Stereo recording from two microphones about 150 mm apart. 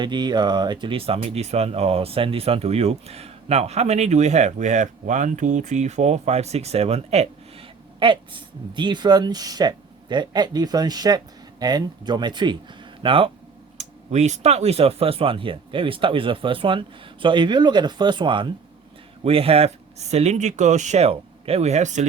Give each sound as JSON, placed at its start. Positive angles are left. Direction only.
{"t": 0.0, "sound": "speech", "side_deg": -30}
{"t": 7.9, "sound": "speech", "side_deg": -35}
{"t": 13.7, "sound": "speech", "side_deg": -50}